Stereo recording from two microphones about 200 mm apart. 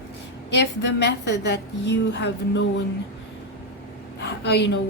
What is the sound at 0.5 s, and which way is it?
A woman's voice, 60° left (ahead or behind).